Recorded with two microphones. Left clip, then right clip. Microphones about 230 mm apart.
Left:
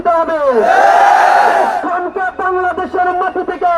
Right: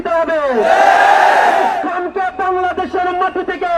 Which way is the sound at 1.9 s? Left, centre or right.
Right.